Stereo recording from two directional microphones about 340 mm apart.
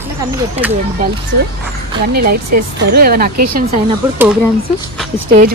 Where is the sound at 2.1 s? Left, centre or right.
Right.